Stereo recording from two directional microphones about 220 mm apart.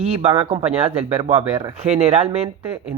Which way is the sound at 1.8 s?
30° right (ahead or behind).